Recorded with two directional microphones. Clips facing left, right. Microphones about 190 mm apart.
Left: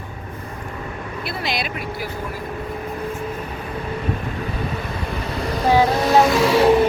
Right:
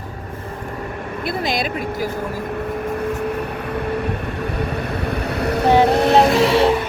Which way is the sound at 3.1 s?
65° right (ahead or behind).